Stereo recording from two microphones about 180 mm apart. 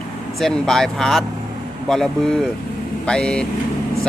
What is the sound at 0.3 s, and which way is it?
Speech, centre (ahead or behind).